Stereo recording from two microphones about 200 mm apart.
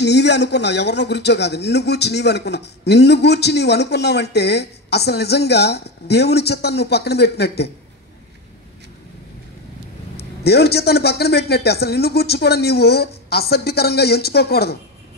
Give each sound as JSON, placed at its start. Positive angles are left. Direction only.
{"t": 0.0, "sound": "a man's voice", "side_deg": 60}
{"t": 10.4, "sound": "a man's voice", "side_deg": 55}